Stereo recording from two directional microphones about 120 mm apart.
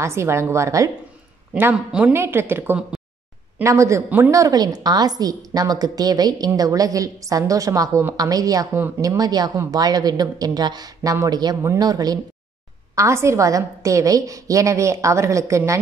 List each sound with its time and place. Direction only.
0.0 s a woman's voice: 25° right (ahead or behind)
1.5 s speech: 10° right (ahead or behind)
2.1 s a woman's voice: 20° right (ahead or behind)